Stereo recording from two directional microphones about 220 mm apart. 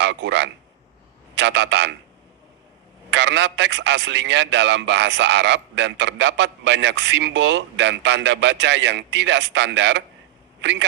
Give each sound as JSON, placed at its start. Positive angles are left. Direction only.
{"t": 0.0, "sound": "a man's voice", "side_deg": -55}
{"t": 3.1, "sound": "a man's voice", "side_deg": -55}